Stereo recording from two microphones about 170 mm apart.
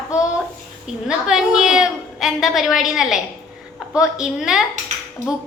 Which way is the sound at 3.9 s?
5° right (ahead or behind).